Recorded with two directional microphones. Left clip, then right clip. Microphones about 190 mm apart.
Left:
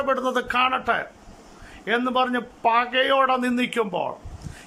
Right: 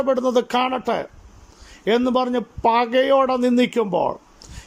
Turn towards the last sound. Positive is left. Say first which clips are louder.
# right 5 dB
turn(degrees=-25)  # may be behind; listen again after turning